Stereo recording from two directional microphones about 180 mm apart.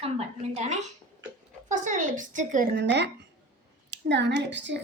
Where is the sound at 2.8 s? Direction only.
70° right (ahead or behind).